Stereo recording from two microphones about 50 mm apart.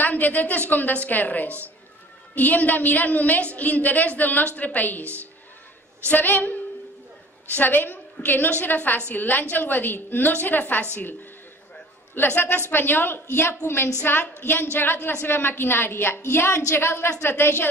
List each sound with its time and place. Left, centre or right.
0.0 s a woman's voice: left
6.0 s a woman's voice: left
12.2 s a woman's voice: left